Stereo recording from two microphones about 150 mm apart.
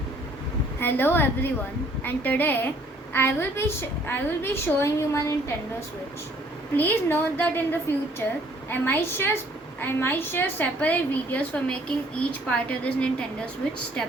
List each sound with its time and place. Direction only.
0.8 s a woman's voice: 15° left (ahead or behind)
6.7 s a woman's voice: 15° left (ahead or behind)